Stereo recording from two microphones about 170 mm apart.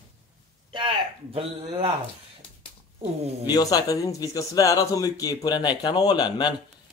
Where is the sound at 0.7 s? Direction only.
30° right (ahead or behind).